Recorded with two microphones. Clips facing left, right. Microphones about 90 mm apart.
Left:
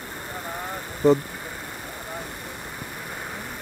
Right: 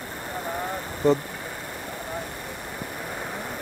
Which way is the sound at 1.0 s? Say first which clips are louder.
Left 3 dB; centre (ahead or behind).